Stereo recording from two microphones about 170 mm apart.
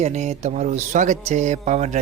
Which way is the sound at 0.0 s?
40° right (ahead or behind).